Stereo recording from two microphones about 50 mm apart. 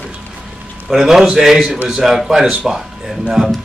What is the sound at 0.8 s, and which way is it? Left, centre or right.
Speech, centre.